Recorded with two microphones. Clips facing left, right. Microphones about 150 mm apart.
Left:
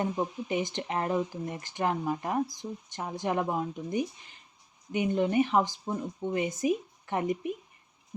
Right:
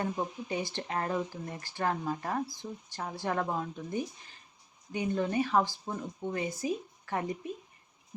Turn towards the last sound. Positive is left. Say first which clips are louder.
# left 4 dB
turn(degrees=20)  # may be behind; listen again after turning